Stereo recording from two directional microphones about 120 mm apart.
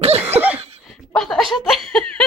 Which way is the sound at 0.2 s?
10° right (ahead or behind).